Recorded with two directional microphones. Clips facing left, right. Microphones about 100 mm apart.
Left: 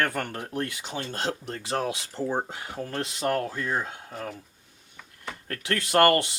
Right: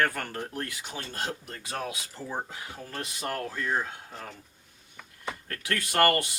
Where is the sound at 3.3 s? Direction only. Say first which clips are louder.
Left 3 dB; 35° left (ahead or behind).